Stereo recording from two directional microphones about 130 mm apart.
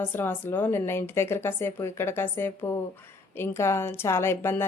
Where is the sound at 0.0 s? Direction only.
15° left (ahead or behind).